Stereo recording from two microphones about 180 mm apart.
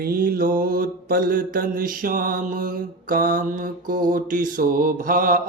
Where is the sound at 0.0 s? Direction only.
55° right (ahead or behind).